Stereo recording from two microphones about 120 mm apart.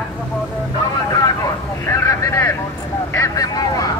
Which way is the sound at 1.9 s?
20° left (ahead or behind).